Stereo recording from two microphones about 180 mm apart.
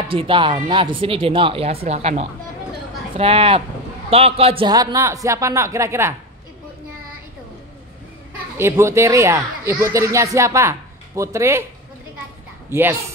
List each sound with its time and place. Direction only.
0.1 s speech: 30° right (ahead or behind)
8.5 s speech: 15° right (ahead or behind)
12.6 s speech: 10° right (ahead or behind)